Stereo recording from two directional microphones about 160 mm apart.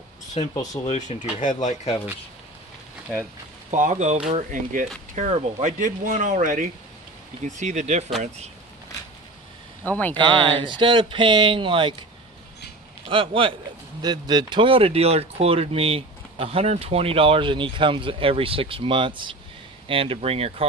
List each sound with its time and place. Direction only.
0.4 s speech: 35° left (ahead or behind)
0.8 s speech: 45° left (ahead or behind)
3.9 s speech: 45° right (ahead or behind)
9.8 s speech: 10° left (ahead or behind)
10.1 s speech: 30° right (ahead or behind)
13.1 s speech: 35° right (ahead or behind)